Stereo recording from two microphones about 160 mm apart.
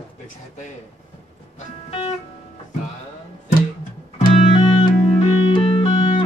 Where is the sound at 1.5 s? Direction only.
40° left (ahead or behind).